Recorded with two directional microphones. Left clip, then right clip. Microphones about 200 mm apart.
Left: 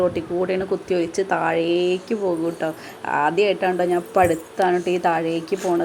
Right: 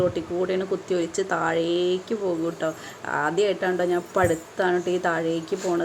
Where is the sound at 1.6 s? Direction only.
35° left (ahead or behind).